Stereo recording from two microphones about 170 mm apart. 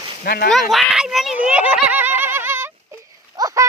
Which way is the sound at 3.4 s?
20° right (ahead or behind).